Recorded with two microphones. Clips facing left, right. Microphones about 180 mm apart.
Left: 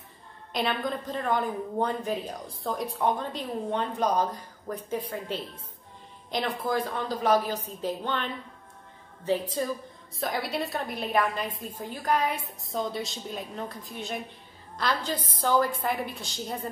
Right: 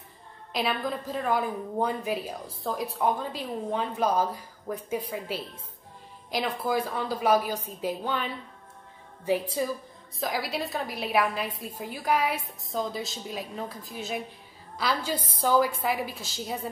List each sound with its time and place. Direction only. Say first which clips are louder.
0.5 s a woman's voice: even; centre (ahead or behind)